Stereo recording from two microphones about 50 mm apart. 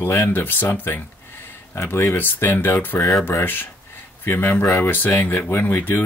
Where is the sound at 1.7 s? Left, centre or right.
Left.